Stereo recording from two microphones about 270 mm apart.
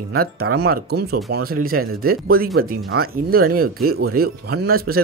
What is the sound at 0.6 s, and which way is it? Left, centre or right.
Speech, right.